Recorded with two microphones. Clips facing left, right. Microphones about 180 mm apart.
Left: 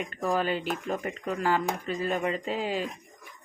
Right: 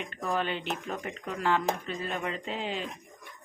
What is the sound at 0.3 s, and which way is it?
Speech, 5° left (ahead or behind).